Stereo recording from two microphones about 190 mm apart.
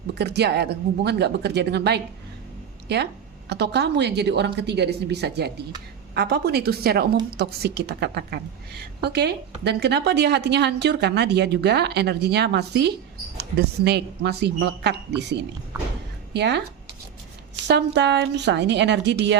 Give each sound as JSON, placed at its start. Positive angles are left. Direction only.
{"t": 0.1, "sound": "a woman's voice", "side_deg": -60}
{"t": 16.3, "sound": "a woman's voice", "side_deg": -65}
{"t": 17.7, "sound": "a woman's voice", "side_deg": -65}